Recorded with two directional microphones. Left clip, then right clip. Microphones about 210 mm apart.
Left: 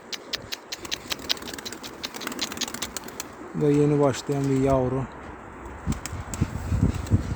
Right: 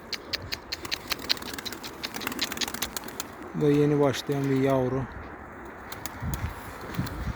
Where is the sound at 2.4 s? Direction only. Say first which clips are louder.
Even; 10° left (ahead or behind).